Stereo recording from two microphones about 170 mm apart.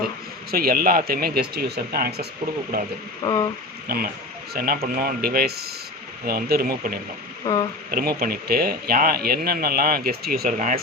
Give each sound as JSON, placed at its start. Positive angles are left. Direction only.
{"t": 0.5, "sound": "speech", "side_deg": -60}
{"t": 3.2, "sound": "speech", "side_deg": 25}
{"t": 3.8, "sound": "speech", "side_deg": -60}
{"t": 7.4, "sound": "speech", "side_deg": 25}
{"t": 7.9, "sound": "speech", "side_deg": -60}